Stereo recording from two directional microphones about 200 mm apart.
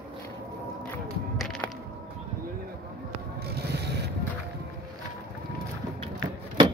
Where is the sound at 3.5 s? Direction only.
55° right (ahead or behind).